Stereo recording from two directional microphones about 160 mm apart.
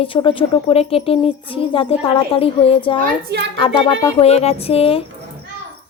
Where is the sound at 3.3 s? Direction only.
90° right.